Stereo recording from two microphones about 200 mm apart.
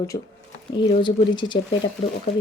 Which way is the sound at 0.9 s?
25° left (ahead or behind).